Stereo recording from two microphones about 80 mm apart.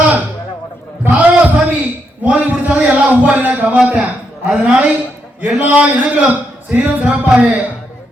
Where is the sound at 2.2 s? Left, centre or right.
Centre.